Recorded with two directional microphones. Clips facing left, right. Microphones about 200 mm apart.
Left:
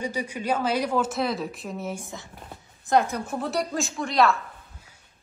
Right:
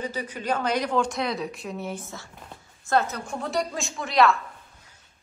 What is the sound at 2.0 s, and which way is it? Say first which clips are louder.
A woman's voice: left 1 dB; 15° left (ahead or behind).